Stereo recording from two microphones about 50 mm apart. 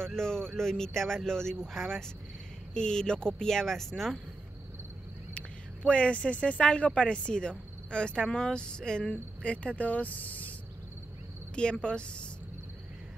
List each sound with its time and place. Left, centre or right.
0.0 s speech: centre
5.9 s speech: left
9.1 s speech: left
11.5 s speech: centre